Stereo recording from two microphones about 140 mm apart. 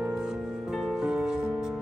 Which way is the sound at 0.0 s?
5° right (ahead or behind).